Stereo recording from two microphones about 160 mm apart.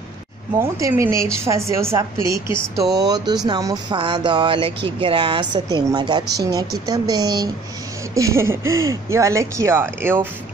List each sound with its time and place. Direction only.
0.6 s speech: 20° right (ahead or behind)